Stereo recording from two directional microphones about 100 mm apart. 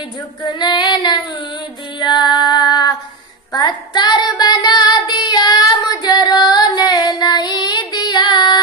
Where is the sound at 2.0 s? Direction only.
45° left (ahead or behind).